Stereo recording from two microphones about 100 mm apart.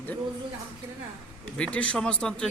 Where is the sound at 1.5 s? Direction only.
10° left (ahead or behind).